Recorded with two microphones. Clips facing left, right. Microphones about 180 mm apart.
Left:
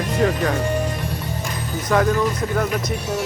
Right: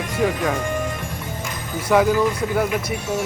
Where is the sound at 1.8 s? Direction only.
5° right (ahead or behind).